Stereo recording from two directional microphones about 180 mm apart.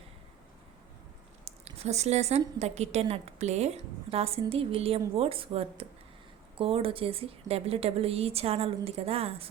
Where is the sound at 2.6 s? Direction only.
35° right (ahead or behind).